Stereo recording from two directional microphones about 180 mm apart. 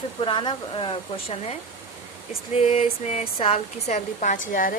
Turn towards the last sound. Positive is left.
turn(degrees=50)  # may be behind; listen again after turning